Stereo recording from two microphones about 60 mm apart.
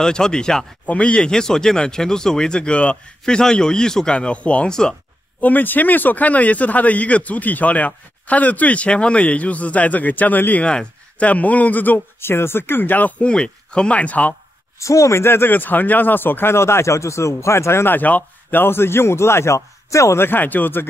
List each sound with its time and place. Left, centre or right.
0.0 s speech: centre; by 10.6 s left
10.6 s speech: centre
12.2 s speech: left
13.3 s speech: centre
14.8 s speech: left
17.9 s speech: left
20.2 s speech: left